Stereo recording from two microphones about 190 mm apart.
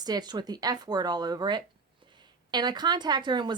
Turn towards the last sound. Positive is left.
turn(degrees=-25)  # may be behind; listen again after turning